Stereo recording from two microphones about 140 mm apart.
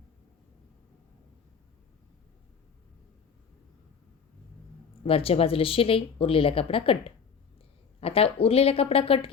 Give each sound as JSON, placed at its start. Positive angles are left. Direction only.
{"t": 5.0, "sound": "a woman's voice", "side_deg": 40}